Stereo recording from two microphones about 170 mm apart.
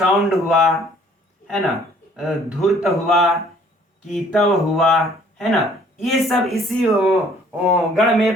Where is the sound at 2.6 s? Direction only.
Centre (ahead or behind).